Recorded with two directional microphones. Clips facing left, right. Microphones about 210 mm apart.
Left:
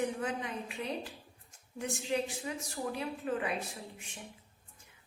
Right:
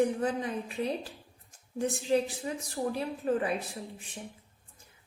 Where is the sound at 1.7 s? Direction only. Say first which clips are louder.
Right 6 dB; 35° right (ahead or behind).